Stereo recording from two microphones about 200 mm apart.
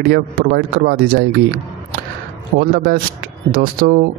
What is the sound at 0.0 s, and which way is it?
Speech, 50° right (ahead or behind).